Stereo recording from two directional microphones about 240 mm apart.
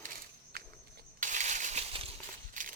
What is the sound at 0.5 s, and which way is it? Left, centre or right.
Walk, right.